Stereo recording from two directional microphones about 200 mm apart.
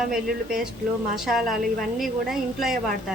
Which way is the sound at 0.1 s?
Centre (ahead or behind).